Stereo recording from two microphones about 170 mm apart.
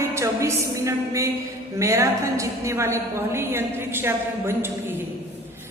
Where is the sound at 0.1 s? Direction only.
15° right (ahead or behind).